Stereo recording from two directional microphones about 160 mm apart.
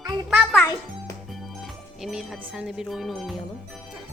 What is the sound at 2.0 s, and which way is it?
Speech, centre (ahead or behind).